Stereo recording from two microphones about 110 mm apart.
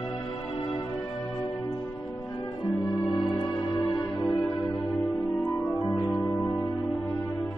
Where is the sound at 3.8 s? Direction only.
30° left (ahead or behind).